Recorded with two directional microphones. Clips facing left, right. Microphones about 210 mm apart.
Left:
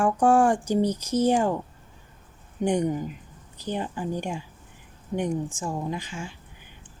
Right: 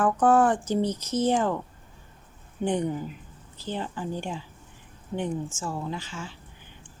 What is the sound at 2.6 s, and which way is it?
Speech, 15° left (ahead or behind).